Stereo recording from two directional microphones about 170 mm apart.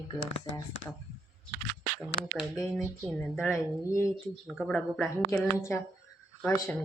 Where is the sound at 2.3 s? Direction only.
Centre (ahead or behind).